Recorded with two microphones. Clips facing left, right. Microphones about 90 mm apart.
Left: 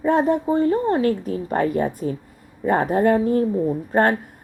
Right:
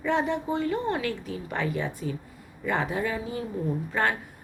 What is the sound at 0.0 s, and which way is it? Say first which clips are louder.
A woman's voice: left 8 dB; 40° left (ahead or behind).